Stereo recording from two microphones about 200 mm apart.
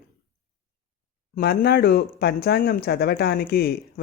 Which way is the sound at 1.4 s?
50° left (ahead or behind).